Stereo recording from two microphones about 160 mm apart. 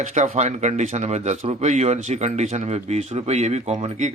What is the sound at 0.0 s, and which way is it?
Speech, 50° right (ahead or behind).